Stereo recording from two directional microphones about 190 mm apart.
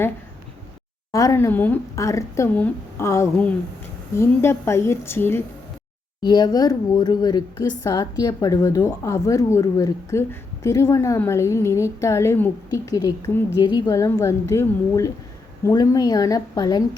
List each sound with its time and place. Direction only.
1.1 s a woman's voice: 15° left (ahead or behind)